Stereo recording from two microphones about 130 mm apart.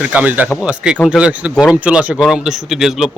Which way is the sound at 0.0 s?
10° right (ahead or behind).